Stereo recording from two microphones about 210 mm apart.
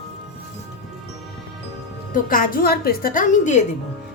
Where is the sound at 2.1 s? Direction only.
40° left (ahead or behind).